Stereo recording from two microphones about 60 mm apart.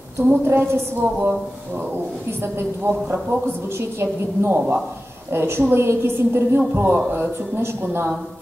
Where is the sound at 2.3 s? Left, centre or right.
Right.